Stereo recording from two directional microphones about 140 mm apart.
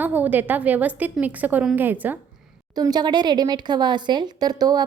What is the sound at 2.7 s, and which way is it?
Speech, 30° right (ahead or behind).